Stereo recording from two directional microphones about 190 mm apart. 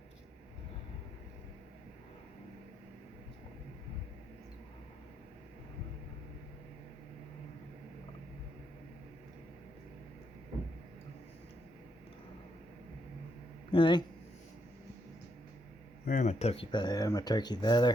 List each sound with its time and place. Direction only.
13.7 s speech: 25° left (ahead or behind)
16.0 s speech: 40° left (ahead or behind); by 17.9 s 20° left (ahead or behind)